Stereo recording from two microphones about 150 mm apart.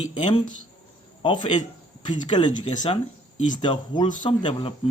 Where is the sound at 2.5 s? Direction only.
50° left (ahead or behind).